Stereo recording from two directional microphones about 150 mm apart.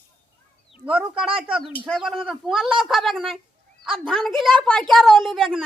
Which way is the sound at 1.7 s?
5° left (ahead or behind).